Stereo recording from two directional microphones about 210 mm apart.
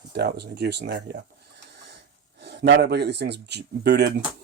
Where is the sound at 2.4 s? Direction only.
55° right (ahead or behind).